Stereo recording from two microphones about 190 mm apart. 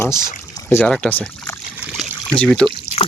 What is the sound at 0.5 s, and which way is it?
Pour, 15° left (ahead or behind).